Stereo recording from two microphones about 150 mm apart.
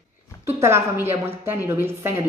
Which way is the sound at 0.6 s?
15° right (ahead or behind).